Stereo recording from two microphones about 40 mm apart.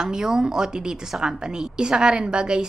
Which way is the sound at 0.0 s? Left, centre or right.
Centre.